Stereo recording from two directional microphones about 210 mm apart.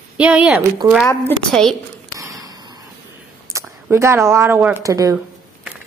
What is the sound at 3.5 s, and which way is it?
Speech, 15° right (ahead or behind).